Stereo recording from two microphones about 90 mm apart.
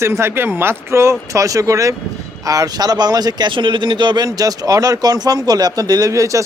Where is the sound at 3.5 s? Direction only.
65° right (ahead or behind).